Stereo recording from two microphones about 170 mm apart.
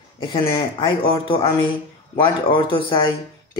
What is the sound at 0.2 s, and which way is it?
Speech, 30° left (ahead or behind).